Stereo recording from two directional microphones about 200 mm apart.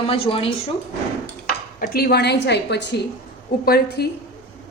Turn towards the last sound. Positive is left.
turn(degrees=55)  # may be behind; listen again after turning